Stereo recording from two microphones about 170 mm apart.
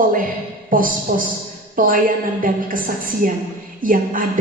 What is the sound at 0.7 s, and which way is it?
A woman's voice, 55° right (ahead or behind).